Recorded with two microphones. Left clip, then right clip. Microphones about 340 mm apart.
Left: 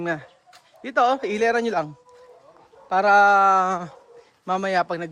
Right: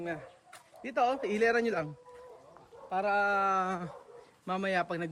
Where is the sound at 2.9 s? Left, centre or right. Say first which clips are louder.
Left 13 dB; centre.